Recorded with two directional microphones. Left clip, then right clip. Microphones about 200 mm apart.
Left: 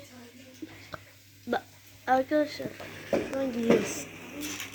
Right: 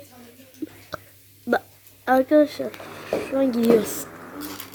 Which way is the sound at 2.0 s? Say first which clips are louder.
Right 8 dB; 50° right (ahead or behind).